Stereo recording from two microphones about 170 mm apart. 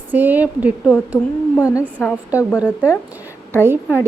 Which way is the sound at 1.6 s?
20° left (ahead or behind).